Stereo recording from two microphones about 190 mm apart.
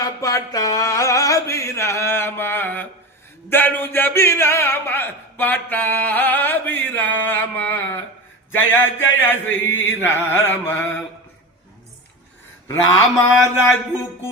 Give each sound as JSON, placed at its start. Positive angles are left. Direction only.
{"t": 0.0, "sound": "a sound", "side_deg": 15}
{"t": 3.5, "sound": "speech", "side_deg": 10}
{"t": 9.7, "sound": "chant", "side_deg": 80}
{"t": 10.2, "sound": "speech", "side_deg": 10}
{"t": 12.6, "sound": "speech", "side_deg": 15}